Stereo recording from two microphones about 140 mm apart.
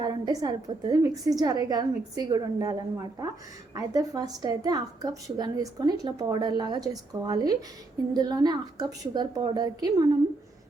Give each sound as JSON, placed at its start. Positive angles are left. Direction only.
{"t": 0.0, "sound": "a woman's voice", "side_deg": -30}